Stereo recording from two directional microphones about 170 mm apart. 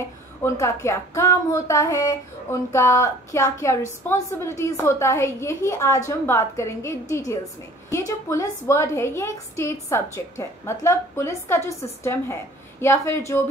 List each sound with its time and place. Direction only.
0.4 s a woman's voice: 15° left (ahead or behind)